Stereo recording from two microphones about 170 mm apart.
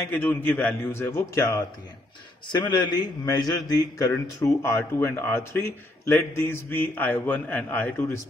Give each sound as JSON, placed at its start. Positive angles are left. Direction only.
{"t": 0.0, "sound": "a man's voice", "side_deg": 10}